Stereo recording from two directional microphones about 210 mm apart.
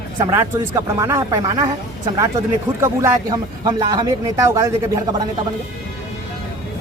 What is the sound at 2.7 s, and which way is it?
Speech, 15° right (ahead or behind).